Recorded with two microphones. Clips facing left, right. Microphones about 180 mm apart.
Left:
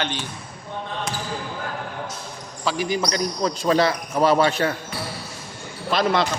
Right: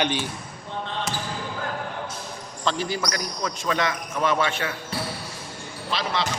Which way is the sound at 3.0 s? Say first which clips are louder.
Left 5 dB; 30° left (ahead or behind).